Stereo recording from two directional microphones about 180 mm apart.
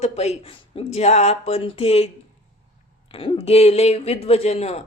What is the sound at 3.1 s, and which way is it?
Speech, 30° left (ahead or behind).